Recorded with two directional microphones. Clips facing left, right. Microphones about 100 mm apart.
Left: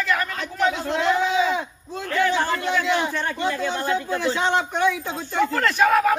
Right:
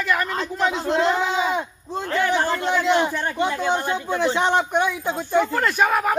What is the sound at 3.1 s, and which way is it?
Speech, 15° right (ahead or behind).